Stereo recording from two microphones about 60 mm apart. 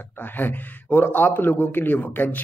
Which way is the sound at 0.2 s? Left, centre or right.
Left.